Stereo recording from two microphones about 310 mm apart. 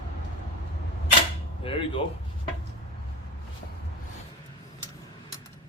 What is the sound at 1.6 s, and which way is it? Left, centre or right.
Speech, centre.